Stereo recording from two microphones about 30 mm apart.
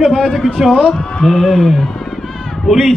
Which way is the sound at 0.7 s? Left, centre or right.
Left.